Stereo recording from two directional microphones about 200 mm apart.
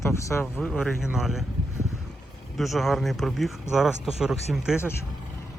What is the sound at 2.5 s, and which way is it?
Speech, centre (ahead or behind).